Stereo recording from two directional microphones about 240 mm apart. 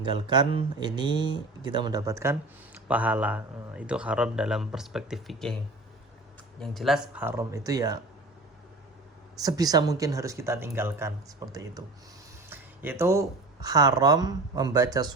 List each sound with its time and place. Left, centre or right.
0.0 s speech: centre
6.6 s speech: centre
9.3 s speech: centre